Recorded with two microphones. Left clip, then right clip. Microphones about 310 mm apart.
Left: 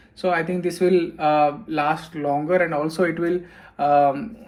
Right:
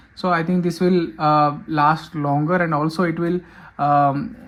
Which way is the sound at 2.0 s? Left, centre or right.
Right.